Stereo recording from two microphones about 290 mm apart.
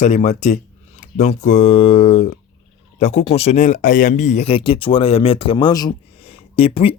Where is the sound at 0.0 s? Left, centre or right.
Left.